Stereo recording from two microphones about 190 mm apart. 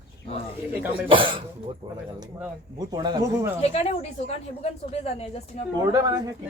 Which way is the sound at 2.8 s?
20° right (ahead or behind).